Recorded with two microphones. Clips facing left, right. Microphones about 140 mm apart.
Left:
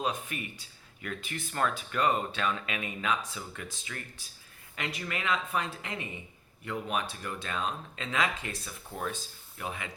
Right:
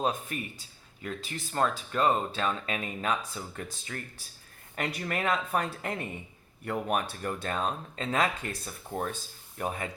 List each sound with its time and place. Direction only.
0.3 s speech: 40° right (ahead or behind)